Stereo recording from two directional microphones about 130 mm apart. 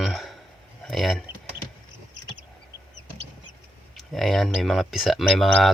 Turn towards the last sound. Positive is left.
turn(degrees=0)  # may be behind; listen again after turning